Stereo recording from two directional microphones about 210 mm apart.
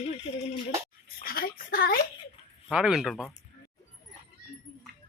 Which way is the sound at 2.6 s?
Centre (ahead or behind).